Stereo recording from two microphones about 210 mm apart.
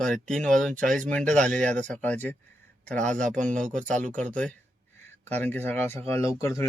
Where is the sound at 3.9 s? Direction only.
35° right (ahead or behind).